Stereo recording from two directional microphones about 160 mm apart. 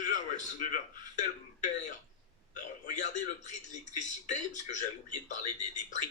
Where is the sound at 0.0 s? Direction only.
55° left (ahead or behind).